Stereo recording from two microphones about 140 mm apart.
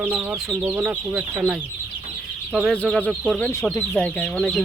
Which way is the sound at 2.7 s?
10° left (ahead or behind).